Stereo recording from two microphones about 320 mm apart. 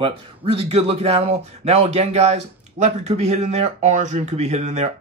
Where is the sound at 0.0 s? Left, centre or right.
Centre.